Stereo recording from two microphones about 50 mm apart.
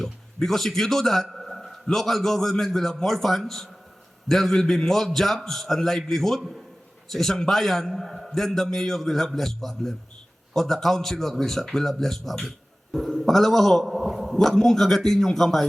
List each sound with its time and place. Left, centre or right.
0.0 s a man's voice: centre